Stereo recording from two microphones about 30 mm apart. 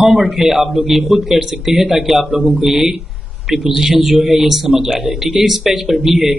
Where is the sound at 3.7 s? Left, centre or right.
Centre.